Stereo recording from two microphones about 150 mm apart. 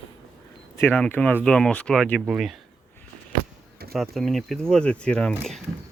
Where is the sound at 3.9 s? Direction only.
Centre (ahead or behind).